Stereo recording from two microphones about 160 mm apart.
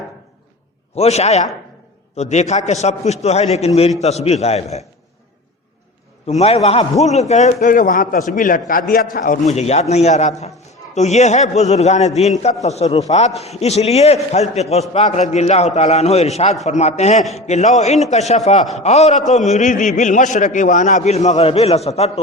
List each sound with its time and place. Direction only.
0.9 s a man's voice: 45° left (ahead or behind)
6.4 s a man's voice: 40° left (ahead or behind); by 9.4 s 60° left (ahead or behind)
9.5 s a man's voice: 45° left (ahead or behind)